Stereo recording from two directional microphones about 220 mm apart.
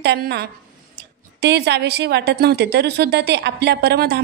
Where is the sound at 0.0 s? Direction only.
50° right (ahead or behind).